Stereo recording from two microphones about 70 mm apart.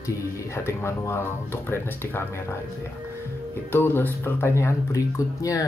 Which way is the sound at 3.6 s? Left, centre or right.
Left.